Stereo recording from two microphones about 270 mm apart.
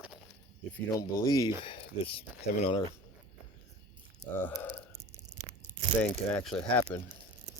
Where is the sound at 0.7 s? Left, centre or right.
Centre.